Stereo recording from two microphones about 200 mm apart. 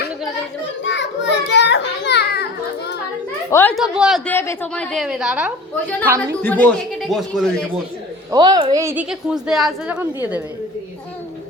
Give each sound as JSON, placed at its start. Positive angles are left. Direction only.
{"t": 0.9, "sound": "children playing", "side_deg": 65}
{"t": 3.5, "sound": "speech", "side_deg": 10}
{"t": 3.8, "sound": "a woman's voice", "side_deg": -5}
{"t": 4.3, "sound": "a woman's voice", "side_deg": 10}
{"t": 6.1, "sound": "a woman's voice", "side_deg": -15}
{"t": 6.4, "sound": "a woman's voice", "side_deg": 10}
{"t": 8.3, "sound": "a woman's voice", "side_deg": -20}
{"t": 9.0, "sound": "a woman's voice", "side_deg": 0}